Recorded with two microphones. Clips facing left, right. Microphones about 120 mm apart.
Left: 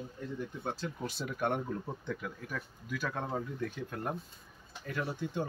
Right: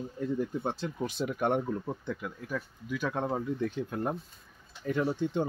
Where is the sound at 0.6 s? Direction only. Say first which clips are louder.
Right 4 dB; 20° right (ahead or behind).